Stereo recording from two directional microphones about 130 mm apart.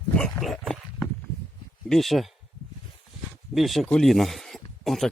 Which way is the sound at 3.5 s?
Centre (ahead or behind).